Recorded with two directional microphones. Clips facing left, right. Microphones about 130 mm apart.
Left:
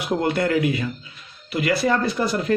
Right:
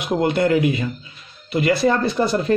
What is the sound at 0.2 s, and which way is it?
Speech, 20° right (ahead or behind).